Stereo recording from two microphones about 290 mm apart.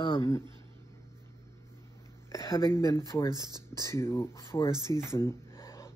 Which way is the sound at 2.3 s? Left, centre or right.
Centre.